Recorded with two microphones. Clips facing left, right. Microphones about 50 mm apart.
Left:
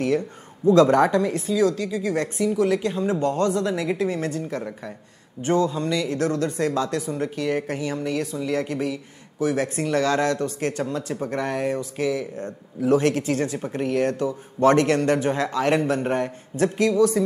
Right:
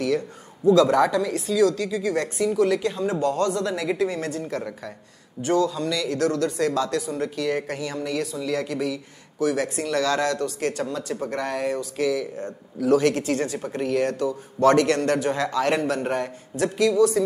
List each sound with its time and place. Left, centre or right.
0.7 s speech: left
1.5 s speech: centre
5.4 s speech: left
16.9 s speech: centre